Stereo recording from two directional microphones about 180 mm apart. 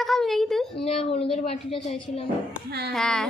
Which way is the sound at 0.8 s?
35° left (ahead or behind).